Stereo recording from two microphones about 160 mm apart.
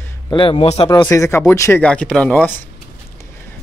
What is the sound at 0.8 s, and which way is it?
Speech, 25° left (ahead or behind).